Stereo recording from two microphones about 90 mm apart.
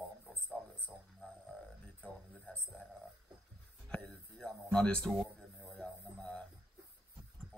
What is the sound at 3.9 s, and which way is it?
Speech, 10° left (ahead or behind).